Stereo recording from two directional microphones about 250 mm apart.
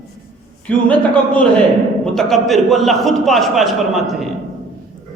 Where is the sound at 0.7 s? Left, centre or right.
Centre.